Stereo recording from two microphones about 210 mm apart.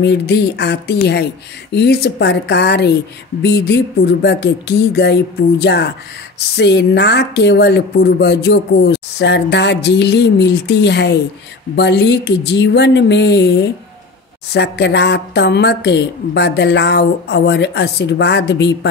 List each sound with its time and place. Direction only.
0.0 s speech: 55° left (ahead or behind)